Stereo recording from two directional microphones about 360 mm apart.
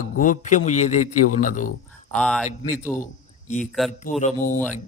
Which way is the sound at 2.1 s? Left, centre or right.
Centre.